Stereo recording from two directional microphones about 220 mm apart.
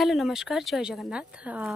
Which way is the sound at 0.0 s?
Centre (ahead or behind).